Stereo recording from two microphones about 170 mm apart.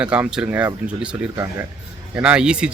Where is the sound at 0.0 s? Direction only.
5° right (ahead or behind).